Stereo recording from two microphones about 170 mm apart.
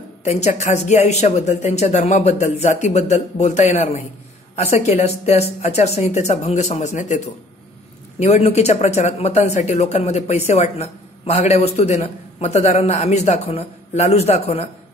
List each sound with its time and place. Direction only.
0.2 s speech: 40° left (ahead or behind)